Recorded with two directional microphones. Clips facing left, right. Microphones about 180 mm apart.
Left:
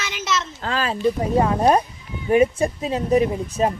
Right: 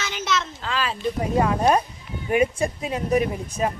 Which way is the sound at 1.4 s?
30° left (ahead or behind).